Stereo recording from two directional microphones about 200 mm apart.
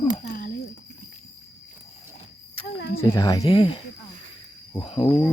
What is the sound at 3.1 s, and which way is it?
Speech, 20° left (ahead or behind).